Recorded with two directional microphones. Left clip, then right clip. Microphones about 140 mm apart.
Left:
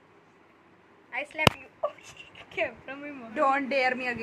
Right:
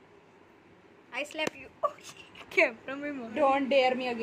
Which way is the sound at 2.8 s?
20° right (ahead or behind).